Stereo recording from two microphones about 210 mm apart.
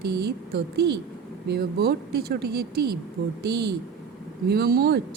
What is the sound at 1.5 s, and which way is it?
Speech, 50° right (ahead or behind).